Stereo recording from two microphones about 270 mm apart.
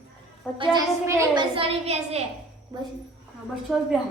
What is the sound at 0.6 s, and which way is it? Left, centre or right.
A woman's voice, centre.